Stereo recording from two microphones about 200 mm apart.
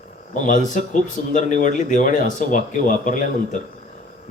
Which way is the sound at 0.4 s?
40° left (ahead or behind).